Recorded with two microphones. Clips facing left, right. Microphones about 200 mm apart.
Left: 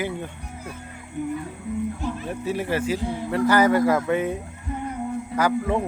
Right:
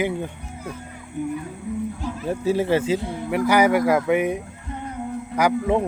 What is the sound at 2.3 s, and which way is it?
Speech, 30° right (ahead or behind).